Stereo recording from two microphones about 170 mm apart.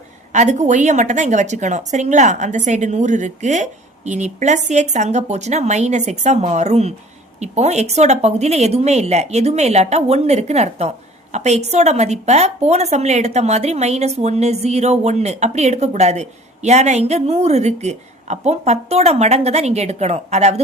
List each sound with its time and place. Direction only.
0.3 s a woman's voice: 45° right (ahead or behind)